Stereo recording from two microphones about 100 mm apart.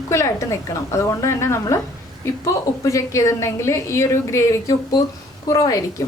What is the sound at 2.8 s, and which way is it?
A woman's voice, 30° left (ahead or behind).